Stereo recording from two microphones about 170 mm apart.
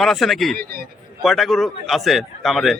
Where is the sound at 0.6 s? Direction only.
65° right (ahead or behind).